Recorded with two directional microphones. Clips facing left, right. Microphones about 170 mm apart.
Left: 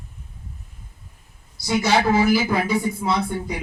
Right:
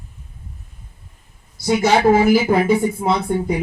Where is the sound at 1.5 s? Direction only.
50° right (ahead or behind).